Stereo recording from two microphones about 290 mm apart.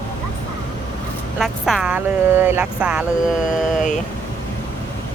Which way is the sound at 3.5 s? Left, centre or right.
Left.